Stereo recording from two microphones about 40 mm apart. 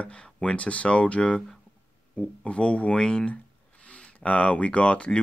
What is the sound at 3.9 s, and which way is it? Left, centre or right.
Speech, left.